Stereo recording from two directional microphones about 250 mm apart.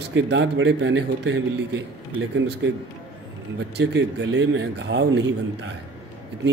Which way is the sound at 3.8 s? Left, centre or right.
Right.